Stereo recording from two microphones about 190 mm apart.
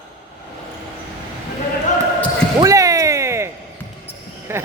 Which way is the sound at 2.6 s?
15° right (ahead or behind).